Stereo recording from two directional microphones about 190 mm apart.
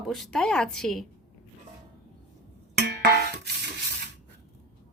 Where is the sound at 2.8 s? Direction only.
60° right (ahead or behind).